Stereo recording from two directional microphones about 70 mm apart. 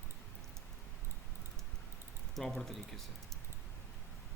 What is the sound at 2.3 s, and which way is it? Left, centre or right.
Speech, centre.